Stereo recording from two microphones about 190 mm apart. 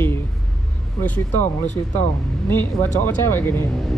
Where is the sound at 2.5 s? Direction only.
10° left (ahead or behind).